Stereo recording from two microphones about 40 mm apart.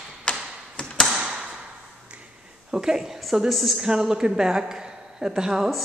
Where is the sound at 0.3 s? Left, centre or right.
Left.